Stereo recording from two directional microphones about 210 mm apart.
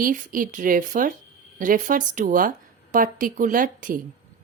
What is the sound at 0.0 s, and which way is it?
A woman's voice, 40° right (ahead or behind).